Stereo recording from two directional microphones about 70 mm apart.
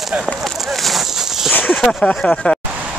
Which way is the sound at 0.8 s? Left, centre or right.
Centre.